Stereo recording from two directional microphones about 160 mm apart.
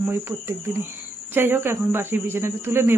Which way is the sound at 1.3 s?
15° right (ahead or behind).